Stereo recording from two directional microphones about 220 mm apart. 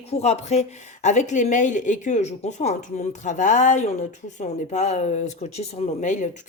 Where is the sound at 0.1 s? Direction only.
30° left (ahead or behind).